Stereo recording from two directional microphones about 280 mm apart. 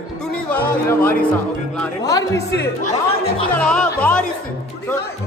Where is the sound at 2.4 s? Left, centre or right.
Left.